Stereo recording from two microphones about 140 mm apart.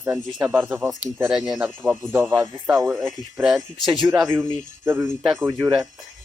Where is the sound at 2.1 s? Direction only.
15° right (ahead or behind).